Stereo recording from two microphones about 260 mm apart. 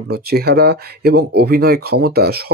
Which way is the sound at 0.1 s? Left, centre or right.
Right.